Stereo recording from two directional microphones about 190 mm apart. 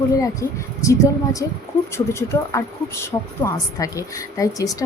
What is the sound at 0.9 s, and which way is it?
Speech, 15° left (ahead or behind).